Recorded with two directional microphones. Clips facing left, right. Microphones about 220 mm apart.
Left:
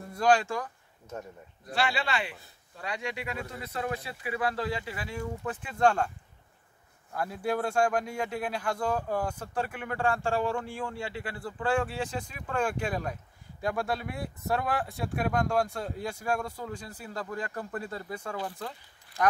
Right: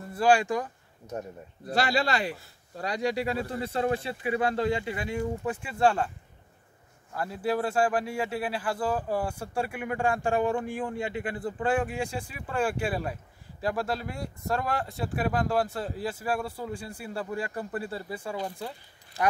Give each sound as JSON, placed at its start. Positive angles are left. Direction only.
{"t": 0.1, "sound": "speech", "side_deg": -10}
{"t": 1.7, "sound": "speech", "side_deg": -40}
{"t": 7.2, "sound": "speech", "side_deg": 0}